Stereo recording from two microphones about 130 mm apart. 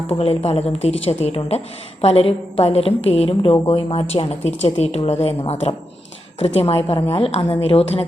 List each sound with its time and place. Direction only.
0.1 s a woman's voice: 50° left (ahead or behind)